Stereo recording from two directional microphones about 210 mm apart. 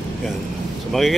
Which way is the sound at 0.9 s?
Centre (ahead or behind).